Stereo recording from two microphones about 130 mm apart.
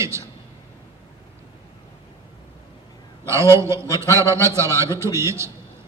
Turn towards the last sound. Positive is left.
turn(degrees=-20)  # may be behind; listen again after turning